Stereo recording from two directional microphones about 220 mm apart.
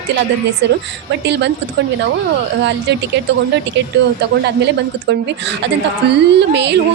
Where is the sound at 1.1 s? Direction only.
50° right (ahead or behind).